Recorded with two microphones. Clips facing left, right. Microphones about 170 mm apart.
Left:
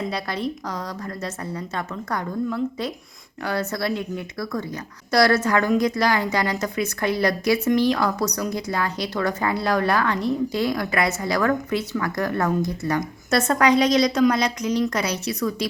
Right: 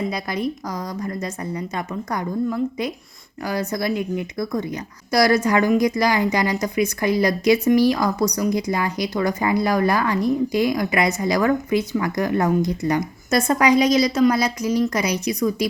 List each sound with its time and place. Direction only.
0.1 s a woman's voice: 10° right (ahead or behind)